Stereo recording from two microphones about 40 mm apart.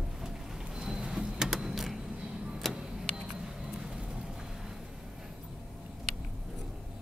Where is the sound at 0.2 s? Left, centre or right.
Centre.